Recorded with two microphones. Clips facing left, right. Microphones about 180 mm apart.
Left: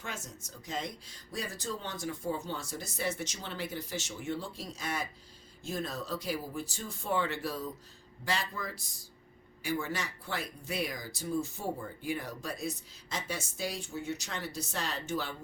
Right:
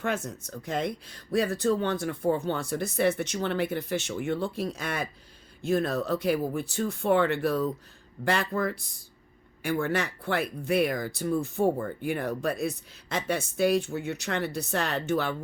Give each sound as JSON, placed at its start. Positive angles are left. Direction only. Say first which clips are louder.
{"t": 0.0, "sound": "speech", "louder": "right 12 dB", "side_deg": -60}